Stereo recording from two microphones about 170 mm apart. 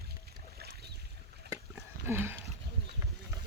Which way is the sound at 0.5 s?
70° right (ahead or behind).